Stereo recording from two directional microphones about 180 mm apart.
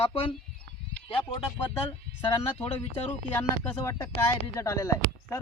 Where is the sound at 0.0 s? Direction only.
30° left (ahead or behind).